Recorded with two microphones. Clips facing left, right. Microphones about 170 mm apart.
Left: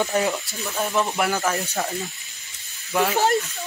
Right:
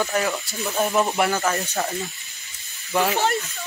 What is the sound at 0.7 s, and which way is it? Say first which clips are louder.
Speech: right 3 dB; 15° right (ahead or behind).